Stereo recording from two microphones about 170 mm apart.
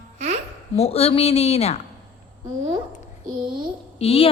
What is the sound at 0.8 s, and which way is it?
Speech, 35° left (ahead or behind).